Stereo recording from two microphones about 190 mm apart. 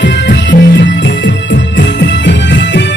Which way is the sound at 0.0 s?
70° left (ahead or behind).